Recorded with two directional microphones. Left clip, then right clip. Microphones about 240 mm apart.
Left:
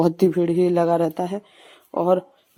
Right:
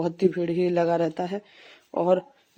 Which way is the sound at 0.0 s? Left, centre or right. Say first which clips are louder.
Left 6 dB; left.